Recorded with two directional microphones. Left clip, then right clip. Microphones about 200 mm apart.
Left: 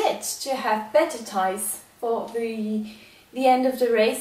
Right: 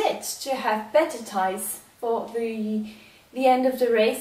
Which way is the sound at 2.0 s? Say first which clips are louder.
Even; 15° right (ahead or behind).